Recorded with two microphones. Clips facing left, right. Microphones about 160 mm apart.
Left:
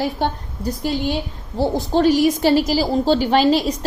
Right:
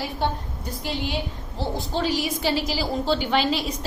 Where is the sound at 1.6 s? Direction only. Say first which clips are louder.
Left 9 dB; 45° left (ahead or behind).